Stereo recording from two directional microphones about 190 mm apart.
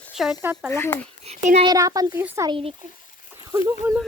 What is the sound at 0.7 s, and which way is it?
Speech, 15° left (ahead or behind).